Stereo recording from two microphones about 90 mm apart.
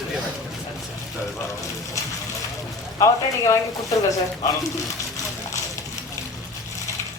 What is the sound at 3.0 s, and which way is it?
Speech, 35° left (ahead or behind).